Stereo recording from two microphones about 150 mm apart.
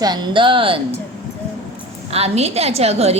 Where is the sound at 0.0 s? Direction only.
30° right (ahead or behind).